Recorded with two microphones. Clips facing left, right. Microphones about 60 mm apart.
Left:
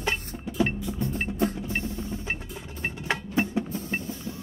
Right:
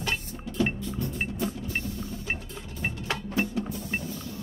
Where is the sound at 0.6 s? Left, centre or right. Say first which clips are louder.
Left 1 dB; centre.